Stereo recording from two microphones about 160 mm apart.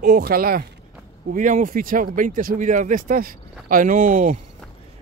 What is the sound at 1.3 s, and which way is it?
Speech, 55° right (ahead or behind).